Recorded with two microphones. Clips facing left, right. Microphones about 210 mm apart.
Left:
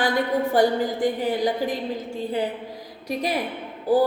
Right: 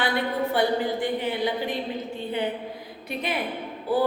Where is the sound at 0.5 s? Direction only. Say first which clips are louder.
Left 4 dB; 40° left (ahead or behind).